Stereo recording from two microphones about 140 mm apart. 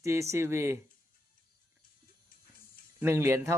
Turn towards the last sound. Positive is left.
turn(degrees=-20)  # may be behind; listen again after turning